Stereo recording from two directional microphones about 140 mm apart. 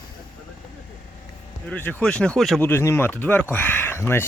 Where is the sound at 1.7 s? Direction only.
15° left (ahead or behind).